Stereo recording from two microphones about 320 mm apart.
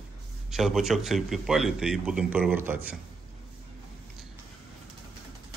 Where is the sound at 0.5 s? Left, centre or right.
Centre.